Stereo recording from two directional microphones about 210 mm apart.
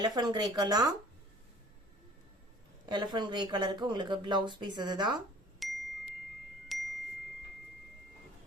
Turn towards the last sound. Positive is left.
turn(degrees=0)  # may be behind; listen again after turning